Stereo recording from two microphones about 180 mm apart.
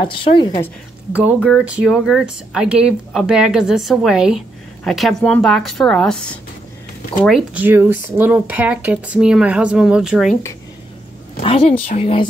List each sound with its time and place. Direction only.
0.0 s a woman's voice: 25° left (ahead or behind)
1.1 s speech: 5° right (ahead or behind)
7.2 s speech: 5° right (ahead or behind)
11.4 s speech: 35° left (ahead or behind)